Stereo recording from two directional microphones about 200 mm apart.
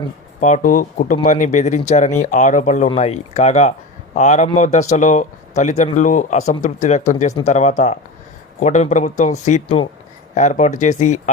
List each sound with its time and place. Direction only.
0.3 s speech: 40° left (ahead or behind)